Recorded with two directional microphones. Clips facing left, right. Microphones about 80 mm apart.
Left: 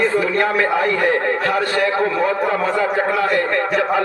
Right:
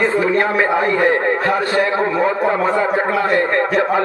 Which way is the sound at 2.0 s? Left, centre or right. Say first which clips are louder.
Right 2 dB; right.